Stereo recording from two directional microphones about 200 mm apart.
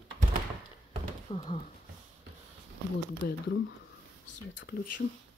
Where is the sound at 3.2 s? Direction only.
55° left (ahead or behind).